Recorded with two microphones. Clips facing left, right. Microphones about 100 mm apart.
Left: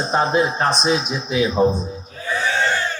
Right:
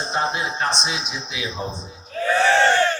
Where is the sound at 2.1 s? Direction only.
70° right (ahead or behind).